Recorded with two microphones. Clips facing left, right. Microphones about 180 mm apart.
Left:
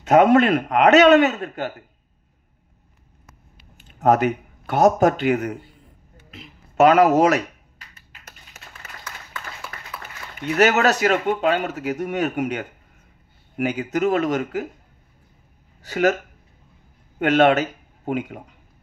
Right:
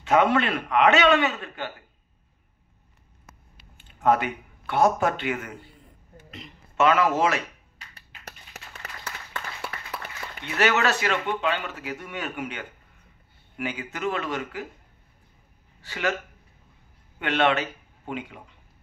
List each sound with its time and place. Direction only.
0.0 s a man's voice: 45° left (ahead or behind)
3.7 s speech: 40° left (ahead or behind)
6.3 s a sound: 5° left (ahead or behind)
6.8 s a man's voice: 40° left (ahead or behind)
10.4 s a man's voice: 40° left (ahead or behind)
15.8 s speech: 40° left (ahead or behind)
17.2 s speech: 45° left (ahead or behind)